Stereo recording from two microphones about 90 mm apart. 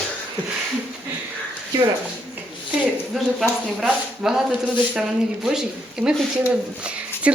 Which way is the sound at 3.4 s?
10° right (ahead or behind).